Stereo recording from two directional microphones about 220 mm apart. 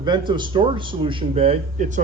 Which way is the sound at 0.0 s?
20° right (ahead or behind).